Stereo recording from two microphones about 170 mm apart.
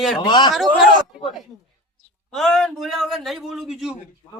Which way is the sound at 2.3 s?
Centre (ahead or behind).